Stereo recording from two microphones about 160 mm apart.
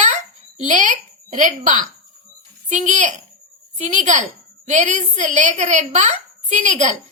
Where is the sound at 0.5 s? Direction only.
50° right (ahead or behind).